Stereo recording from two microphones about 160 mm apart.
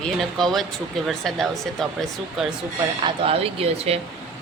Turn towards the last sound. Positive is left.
turn(degrees=-40)  # may be behind; listen again after turning